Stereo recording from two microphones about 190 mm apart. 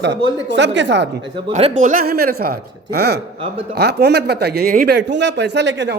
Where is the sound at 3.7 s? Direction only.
60° right (ahead or behind).